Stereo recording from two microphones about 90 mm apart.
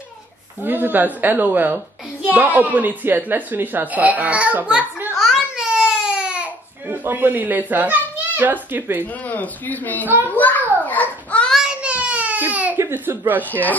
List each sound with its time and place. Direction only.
0.6 s a woman's voice: 20° right (ahead or behind)
5.2 s baby cry: centre (ahead or behind)
5.7 s baby cry: 10° right (ahead or behind)
6.9 s a woman's voice: 25° right (ahead or behind)
9.3 s a man's voice: 20° left (ahead or behind)
10.0 s a woman's voice: 25° right (ahead or behind)
10.3 s a man's voice: 20° left (ahead or behind)
10.9 s baby cry: 15° left (ahead or behind)
11.5 s a sound: 10° right (ahead or behind)
13.3 s a woman's voice: 20° right (ahead or behind)